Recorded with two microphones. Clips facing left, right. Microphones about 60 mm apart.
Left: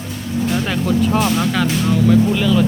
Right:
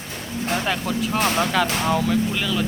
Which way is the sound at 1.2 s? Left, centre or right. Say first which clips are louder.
Left 3 dB; right.